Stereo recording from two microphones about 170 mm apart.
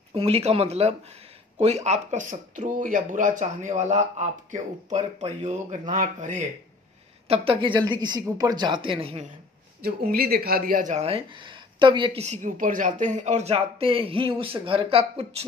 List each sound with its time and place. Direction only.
0.1 s speech: 35° right (ahead or behind)
7.2 s speech: 35° right (ahead or behind)
9.8 s speech: 65° right (ahead or behind); by 12.1 s 30° right (ahead or behind)
12.2 s speech: 45° right (ahead or behind)